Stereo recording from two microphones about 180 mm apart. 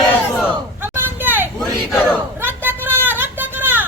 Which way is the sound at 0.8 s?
10° right (ahead or behind).